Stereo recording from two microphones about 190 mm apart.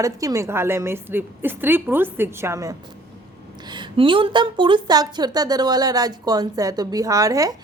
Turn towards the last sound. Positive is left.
turn(degrees=-20)  # may be behind; listen again after turning